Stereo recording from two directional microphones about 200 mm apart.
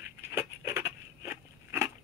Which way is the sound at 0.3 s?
10° right (ahead or behind).